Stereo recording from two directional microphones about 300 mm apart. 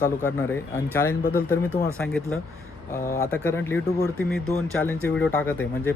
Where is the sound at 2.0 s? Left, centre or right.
Centre.